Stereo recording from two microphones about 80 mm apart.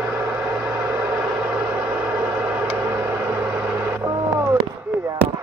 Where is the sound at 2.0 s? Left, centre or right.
Centre.